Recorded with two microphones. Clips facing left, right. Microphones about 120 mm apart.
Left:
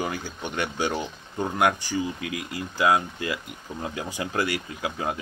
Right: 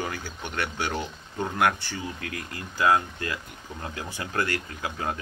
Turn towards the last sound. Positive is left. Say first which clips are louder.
# left 2 dB
turn(degrees=15)  # may be behind; listen again after turning